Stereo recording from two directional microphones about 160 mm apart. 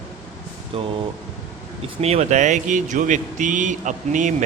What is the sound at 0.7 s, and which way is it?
Speech, 35° right (ahead or behind).